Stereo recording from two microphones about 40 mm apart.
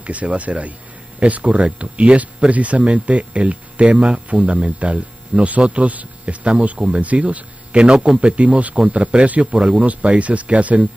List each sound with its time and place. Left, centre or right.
0.0 s speech: right